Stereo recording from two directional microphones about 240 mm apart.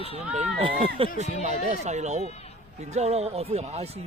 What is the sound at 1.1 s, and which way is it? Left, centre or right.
Speech, right.